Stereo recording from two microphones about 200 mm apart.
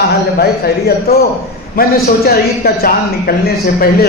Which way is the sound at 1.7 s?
50° left (ahead or behind).